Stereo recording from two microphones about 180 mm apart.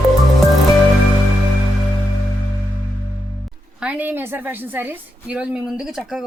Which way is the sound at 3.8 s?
10° right (ahead or behind).